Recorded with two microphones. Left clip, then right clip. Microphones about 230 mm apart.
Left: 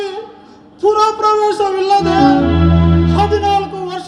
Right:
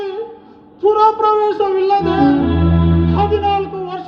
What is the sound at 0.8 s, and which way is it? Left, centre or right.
Music, left.